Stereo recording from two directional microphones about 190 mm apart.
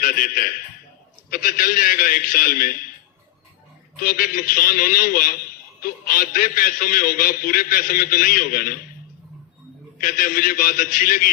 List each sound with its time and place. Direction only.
0.0 s a man's voice: 50° left (ahead or behind)
4.0 s a man's voice: 45° left (ahead or behind)
10.0 s a man's voice: 45° left (ahead or behind)